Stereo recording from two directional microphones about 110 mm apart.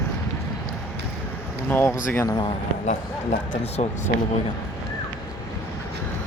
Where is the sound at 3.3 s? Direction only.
90° left.